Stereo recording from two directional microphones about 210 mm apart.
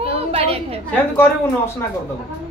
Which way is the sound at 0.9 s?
10° left (ahead or behind).